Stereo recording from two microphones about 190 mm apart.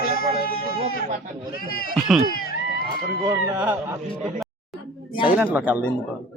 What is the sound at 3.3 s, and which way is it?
Speech, 10° right (ahead or behind).